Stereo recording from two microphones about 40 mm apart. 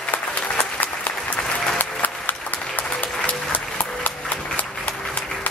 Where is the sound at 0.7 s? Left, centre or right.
Left.